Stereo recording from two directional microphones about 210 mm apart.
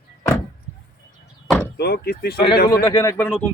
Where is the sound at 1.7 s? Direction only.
50° left (ahead or behind).